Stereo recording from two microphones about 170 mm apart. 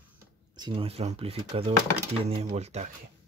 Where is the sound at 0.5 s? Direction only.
30° right (ahead or behind).